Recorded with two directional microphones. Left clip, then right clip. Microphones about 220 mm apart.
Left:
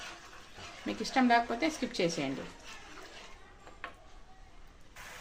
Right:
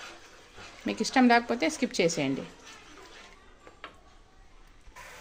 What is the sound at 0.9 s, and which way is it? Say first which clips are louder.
A woman's voice: right 5 dB; 45° right (ahead or behind).